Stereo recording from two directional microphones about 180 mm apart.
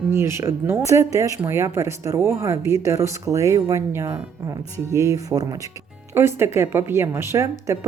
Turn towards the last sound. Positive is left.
turn(degrees=-15)  # may be behind; listen again after turning